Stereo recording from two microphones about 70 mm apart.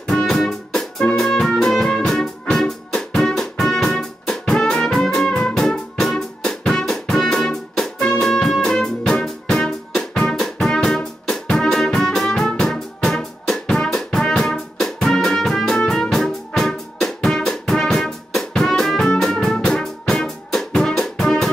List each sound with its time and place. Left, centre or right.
0.0 s music: centre